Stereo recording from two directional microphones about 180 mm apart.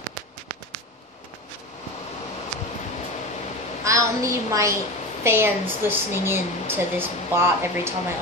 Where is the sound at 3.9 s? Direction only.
15° right (ahead or behind).